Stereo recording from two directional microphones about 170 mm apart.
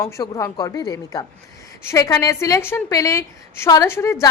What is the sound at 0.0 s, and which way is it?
A woman's voice, 20° left (ahead or behind).